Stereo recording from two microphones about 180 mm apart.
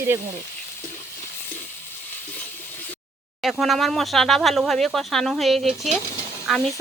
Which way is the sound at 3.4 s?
Centre (ahead or behind).